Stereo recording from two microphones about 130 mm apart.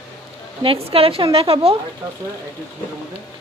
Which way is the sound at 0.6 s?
45° right (ahead or behind).